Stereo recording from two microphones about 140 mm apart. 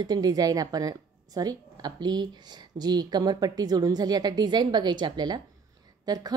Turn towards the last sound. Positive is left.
turn(degrees=-30)  # may be behind; listen again after turning